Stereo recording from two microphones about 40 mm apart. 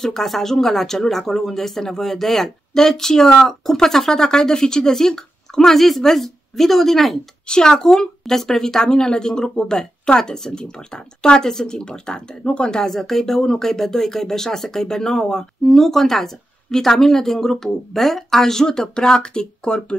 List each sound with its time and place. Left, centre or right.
0.0 s speech: centre
7.4 s speech: left
12.8 s speech: centre